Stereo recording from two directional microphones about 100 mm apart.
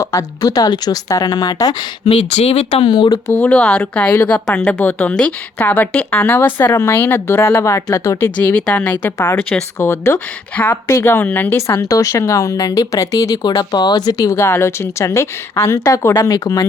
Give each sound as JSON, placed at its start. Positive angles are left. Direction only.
{"t": 0.0, "sound": "speech", "side_deg": 35}
{"t": 2.0, "sound": "speech", "side_deg": 85}
{"t": 2.8, "sound": "speech", "side_deg": 45}
{"t": 3.2, "sound": "a woman's voice", "side_deg": 15}
{"t": 8.5, "sound": "speech", "side_deg": 15}
{"t": 9.1, "sound": "a woman's voice", "side_deg": 25}
{"t": 10.5, "sound": "speech", "side_deg": 15}
{"t": 10.8, "sound": "speech", "side_deg": 25}